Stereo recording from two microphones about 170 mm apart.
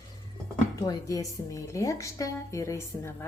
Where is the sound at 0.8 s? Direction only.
20° left (ahead or behind).